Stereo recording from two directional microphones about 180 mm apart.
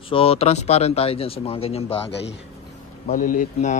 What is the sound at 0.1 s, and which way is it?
Speech, 35° left (ahead or behind).